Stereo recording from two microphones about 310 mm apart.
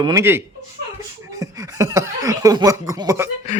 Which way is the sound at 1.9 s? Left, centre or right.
Centre.